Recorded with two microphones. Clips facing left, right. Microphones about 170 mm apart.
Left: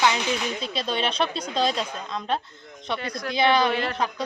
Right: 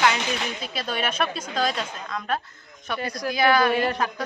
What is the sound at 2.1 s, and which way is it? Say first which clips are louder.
Speech: left 1 dB; 25° left (ahead or behind).